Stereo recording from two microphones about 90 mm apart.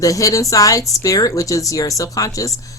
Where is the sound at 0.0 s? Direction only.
40° left (ahead or behind).